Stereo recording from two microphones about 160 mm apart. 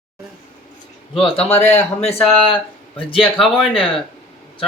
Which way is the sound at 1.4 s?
45° left (ahead or behind).